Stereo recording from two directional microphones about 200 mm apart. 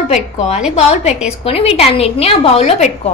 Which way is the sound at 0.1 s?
35° left (ahead or behind).